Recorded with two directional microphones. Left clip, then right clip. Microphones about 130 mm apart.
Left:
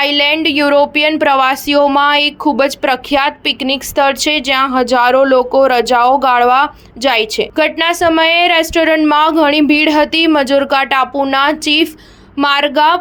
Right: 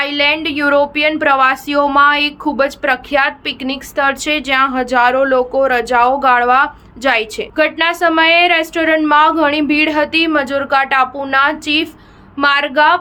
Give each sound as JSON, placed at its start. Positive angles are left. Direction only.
{"t": 0.0, "sound": "a woman's voice", "side_deg": 40}